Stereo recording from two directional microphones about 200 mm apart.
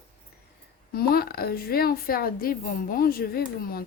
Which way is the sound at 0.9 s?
50° left (ahead or behind).